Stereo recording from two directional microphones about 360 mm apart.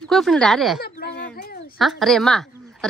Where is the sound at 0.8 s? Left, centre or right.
Left.